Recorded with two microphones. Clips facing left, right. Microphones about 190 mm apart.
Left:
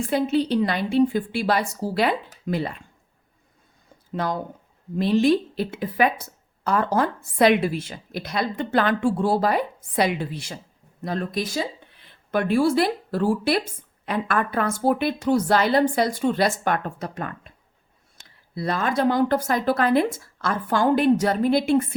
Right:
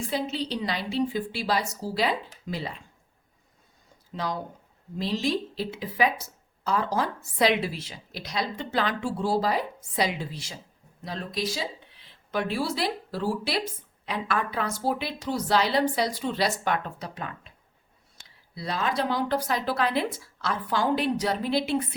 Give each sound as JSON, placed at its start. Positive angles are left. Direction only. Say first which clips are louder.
{"t": 0.1, "sound": "a woman's voice", "louder": "left 10 dB", "side_deg": 55}
{"t": 4.1, "sound": "a woman's voice", "louder": "left 5 dB", "side_deg": 55}
{"t": 18.5, "sound": "a woman's voice", "louder": "left 5 dB", "side_deg": 50}